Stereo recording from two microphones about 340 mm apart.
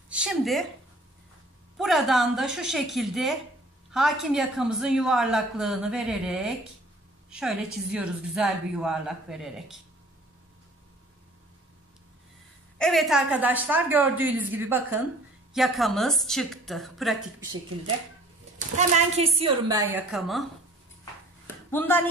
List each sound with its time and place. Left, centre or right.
0.1 s speech: centre
1.8 s speech: centre
12.7 s speech: centre
18.8 s a woman's voice: centre
21.6 s speech: centre